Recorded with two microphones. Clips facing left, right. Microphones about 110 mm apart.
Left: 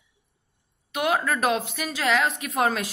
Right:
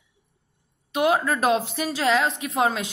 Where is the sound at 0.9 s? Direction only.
30° right (ahead or behind).